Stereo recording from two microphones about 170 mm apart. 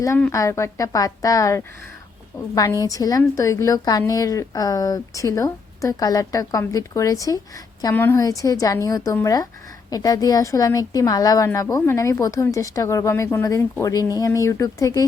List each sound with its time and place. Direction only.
0.2 s a woman's voice: 15° left (ahead or behind)